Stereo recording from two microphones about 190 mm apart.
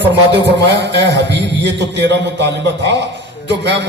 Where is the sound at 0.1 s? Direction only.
65° right (ahead or behind).